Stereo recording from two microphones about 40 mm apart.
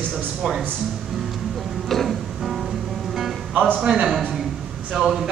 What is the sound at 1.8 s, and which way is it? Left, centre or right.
Music, centre.